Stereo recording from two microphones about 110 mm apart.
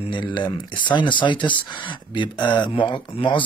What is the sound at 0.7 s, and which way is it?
Speech, 45° left (ahead or behind).